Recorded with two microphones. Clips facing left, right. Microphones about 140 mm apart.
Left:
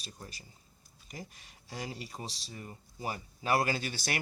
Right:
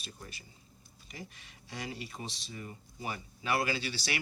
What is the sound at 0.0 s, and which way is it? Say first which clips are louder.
Speech: even; 35° left (ahead or behind).